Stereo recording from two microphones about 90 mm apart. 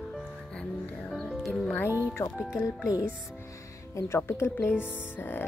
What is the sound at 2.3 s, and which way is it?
Speech, 5° right (ahead or behind).